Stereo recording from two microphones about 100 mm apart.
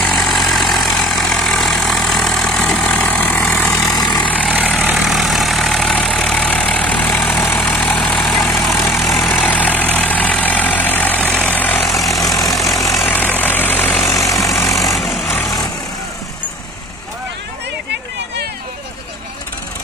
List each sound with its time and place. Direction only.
0.0 s vehicle: centre (ahead or behind)
2.9 s vehicle: 15° left (ahead or behind)
3.9 s vehicle: 45° left (ahead or behind)
4.3 s vehicle: 15° left (ahead or behind)
4.9 s vehicle: centre (ahead or behind); by 8.4 s 15° left (ahead or behind)
8.4 s vehicle: 5° left (ahead or behind)
9.3 s vehicle: 15° left (ahead or behind)
12.4 s vehicle: centre (ahead or behind)
13.0 s vehicle: 20° left (ahead or behind)
14.2 s vehicle: 35° left (ahead or behind)
15.0 s vehicle: centre (ahead or behind)